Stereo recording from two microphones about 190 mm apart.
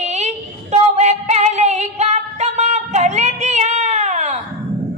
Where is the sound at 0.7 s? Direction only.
35° right (ahead or behind).